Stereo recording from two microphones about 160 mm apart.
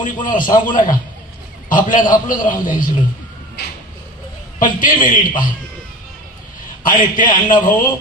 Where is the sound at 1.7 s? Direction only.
55° left (ahead or behind).